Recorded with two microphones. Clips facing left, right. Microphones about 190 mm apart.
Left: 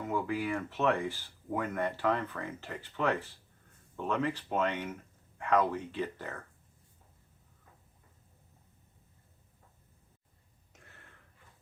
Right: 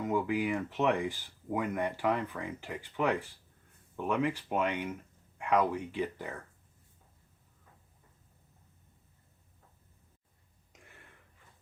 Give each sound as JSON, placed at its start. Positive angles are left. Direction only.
{"t": 0.1, "sound": "speech", "side_deg": -15}